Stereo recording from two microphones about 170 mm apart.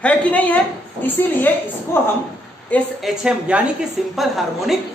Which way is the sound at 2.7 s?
Centre (ahead or behind).